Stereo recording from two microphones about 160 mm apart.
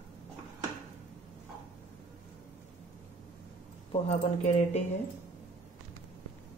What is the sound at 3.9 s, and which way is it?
Speech, 45° left (ahead or behind).